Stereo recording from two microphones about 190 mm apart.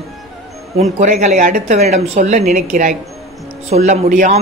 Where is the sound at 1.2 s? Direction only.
40° right (ahead or behind).